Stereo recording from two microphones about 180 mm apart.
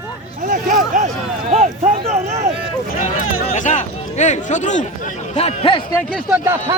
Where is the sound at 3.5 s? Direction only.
45° left (ahead or behind).